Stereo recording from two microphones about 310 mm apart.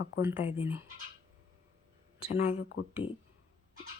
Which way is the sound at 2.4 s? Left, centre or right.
Left.